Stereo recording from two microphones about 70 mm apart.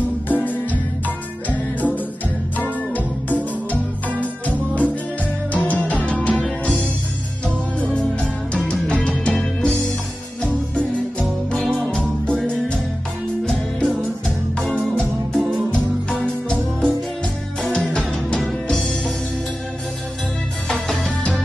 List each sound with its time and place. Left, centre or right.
0.3 s music: left
7.4 s music: centre
15.3 s music: centre